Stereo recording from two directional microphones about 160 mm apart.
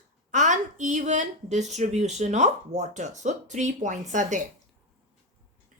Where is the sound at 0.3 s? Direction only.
50° right (ahead or behind).